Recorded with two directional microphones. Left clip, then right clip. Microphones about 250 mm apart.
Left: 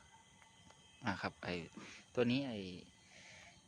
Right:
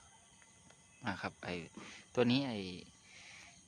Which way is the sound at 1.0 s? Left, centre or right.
Centre.